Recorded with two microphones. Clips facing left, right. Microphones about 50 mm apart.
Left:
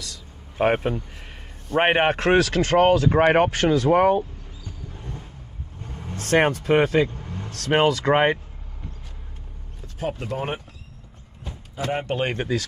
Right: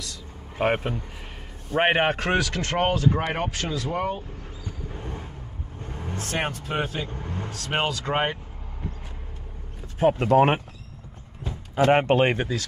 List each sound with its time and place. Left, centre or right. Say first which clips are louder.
0.0 s vehicle: right 1 dB; centre
1.8 s a man's voice: left 2 dB; centre
2.2 s speech: left 6 dB; left
4.9 s vehicle: right 3 dB; right
6.2 s speech: left 10 dB; left
7.1 s vehicle: right 2 dB; right
7.6 s speech: left 8 dB; left
9.9 s speech: right 8 dB; right
10.2 s speech: right 10 dB; right
11.7 s speech: right 8 dB; right
12.1 s speech: right 5 dB; right